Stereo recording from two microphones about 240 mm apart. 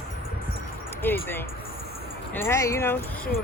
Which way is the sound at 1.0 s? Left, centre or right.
Centre.